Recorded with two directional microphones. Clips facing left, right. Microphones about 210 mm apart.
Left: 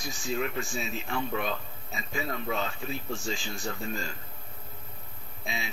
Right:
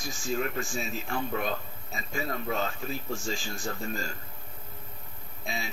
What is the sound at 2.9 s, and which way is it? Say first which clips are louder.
Speech: even; centre (ahead or behind).